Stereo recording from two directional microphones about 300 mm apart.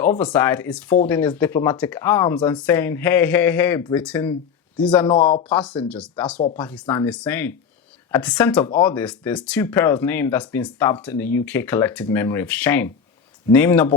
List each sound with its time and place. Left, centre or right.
0.0 s speech: centre
5.0 s speech: centre
5.4 s speech: centre